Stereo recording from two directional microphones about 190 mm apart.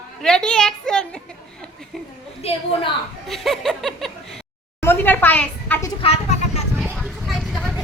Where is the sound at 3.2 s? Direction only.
Centre (ahead or behind).